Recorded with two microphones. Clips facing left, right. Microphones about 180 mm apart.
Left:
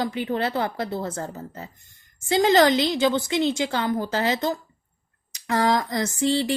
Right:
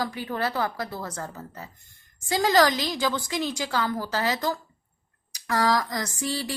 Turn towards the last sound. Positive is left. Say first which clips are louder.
# left 8 dB
turn(degrees=25)  # may be behind; listen again after turning